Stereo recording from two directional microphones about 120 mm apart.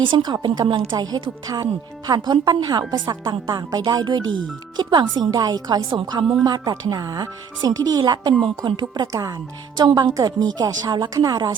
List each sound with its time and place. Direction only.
0.1 s speech: 35° right (ahead or behind)